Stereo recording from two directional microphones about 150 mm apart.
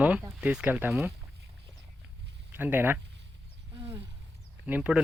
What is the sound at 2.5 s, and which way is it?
Speech, 15° right (ahead or behind).